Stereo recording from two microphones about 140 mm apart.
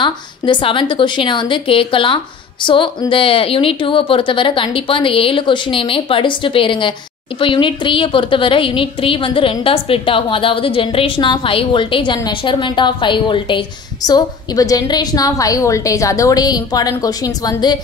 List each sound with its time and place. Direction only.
0.0 s a woman's voice: 35° left (ahead or behind)